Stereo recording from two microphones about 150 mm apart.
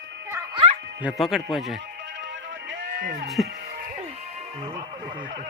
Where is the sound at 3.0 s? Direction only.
65° right (ahead or behind).